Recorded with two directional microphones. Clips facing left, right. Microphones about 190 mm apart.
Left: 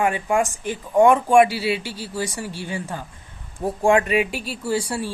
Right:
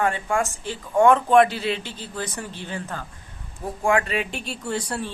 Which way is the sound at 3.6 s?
25° left (ahead or behind).